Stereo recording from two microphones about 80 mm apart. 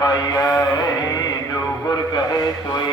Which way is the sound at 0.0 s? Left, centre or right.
Left.